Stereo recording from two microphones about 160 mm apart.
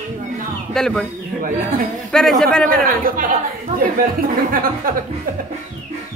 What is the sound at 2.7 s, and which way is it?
Speech, 60° right (ahead or behind).